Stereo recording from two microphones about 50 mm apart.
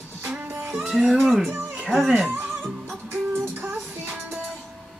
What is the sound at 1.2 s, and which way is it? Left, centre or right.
Music, centre.